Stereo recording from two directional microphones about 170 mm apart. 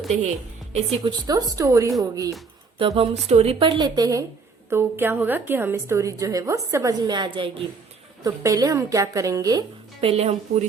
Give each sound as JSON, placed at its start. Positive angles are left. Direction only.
{"t": 1.0, "sound": "a woman's voice", "side_deg": -25}
{"t": 2.7, "sound": "a woman's voice", "side_deg": -35}
{"t": 10.0, "sound": "a woman's voice", "side_deg": -35}